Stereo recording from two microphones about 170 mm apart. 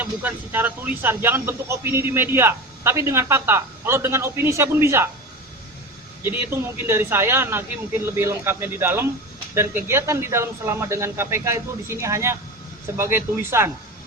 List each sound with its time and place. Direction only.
0.0 s speech: 10° right (ahead or behind)
6.2 s speech: 15° right (ahead or behind)